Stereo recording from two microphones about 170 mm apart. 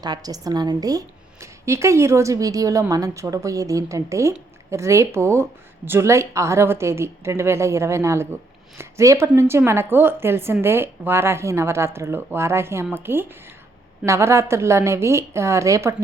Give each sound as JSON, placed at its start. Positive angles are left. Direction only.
{"t": 0.0, "sound": "a woman's voice", "side_deg": -25}